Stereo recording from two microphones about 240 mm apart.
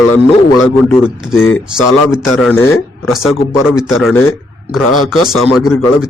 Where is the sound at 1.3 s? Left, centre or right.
Left.